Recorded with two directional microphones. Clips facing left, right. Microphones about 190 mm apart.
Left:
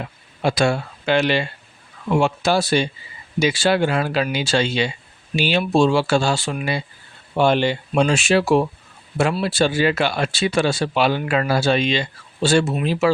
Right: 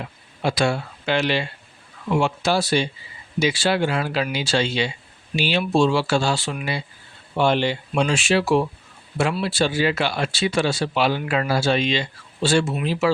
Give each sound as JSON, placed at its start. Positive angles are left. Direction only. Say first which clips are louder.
{"t": 0.4, "sound": "speech", "louder": "left 2 dB", "side_deg": 50}